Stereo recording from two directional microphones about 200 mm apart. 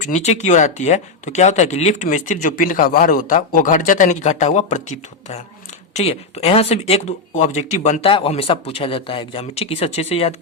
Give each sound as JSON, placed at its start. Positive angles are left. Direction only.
{"t": 0.0, "sound": "speech", "side_deg": 35}